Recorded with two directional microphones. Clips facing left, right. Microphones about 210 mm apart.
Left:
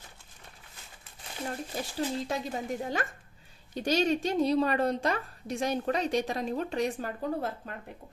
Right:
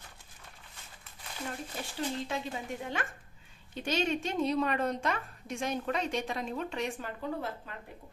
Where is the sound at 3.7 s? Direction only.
40° left (ahead or behind).